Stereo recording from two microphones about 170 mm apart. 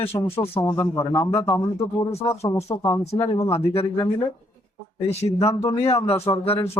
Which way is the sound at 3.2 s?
30° left (ahead or behind).